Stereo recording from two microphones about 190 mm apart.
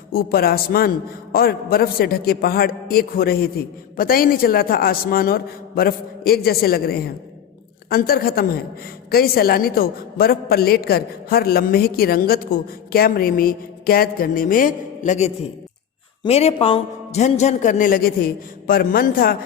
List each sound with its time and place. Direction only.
0.1 s a woman's voice: 50° left (ahead or behind)